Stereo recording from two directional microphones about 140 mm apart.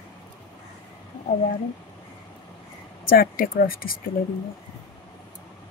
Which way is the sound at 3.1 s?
90° left.